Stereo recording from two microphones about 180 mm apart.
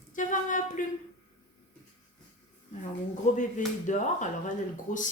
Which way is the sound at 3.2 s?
45° left (ahead or behind).